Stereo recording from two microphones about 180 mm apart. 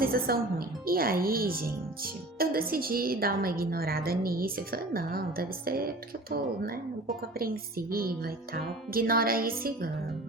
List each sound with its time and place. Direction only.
0.0 s speech: 55° right (ahead or behind)